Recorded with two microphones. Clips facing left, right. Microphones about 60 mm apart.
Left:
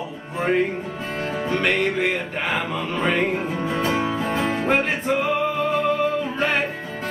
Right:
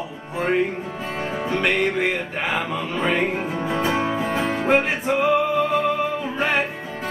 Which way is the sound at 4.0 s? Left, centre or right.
Right.